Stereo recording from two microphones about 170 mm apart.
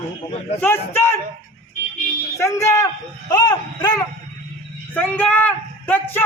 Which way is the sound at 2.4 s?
15° left (ahead or behind).